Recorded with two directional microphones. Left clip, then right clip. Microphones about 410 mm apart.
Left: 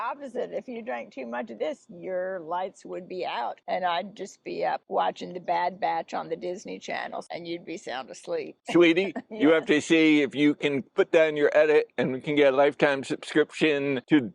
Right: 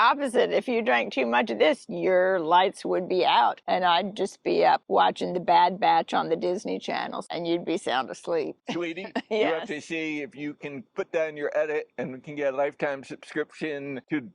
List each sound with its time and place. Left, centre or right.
0.0 s a woman's voice: right; by 7.3 s centre
7.3 s a woman's voice: right
8.3 s speech: right
8.8 s a man's voice: left